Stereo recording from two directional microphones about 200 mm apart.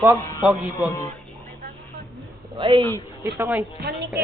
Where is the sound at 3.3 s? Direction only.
10° right (ahead or behind).